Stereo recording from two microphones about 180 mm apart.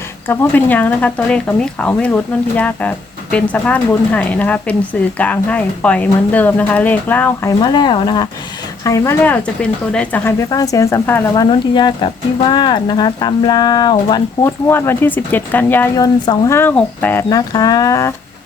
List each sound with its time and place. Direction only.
0.3 s speech: 10° left (ahead or behind)
7.6 s speech: 25° left (ahead or behind); by 10.3 s 10° left (ahead or behind)
10.5 s speech: 20° left (ahead or behind)
11.4 s speech: 25° left (ahead or behind)
14.7 s speech: 15° left (ahead or behind)
16.0 s speech: 25° left (ahead or behind)
16.6 s speech: 10° left (ahead or behind)
17.2 s speech: 20° left (ahead or behind)